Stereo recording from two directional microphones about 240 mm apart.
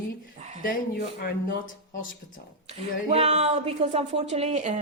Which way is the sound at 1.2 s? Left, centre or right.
Left.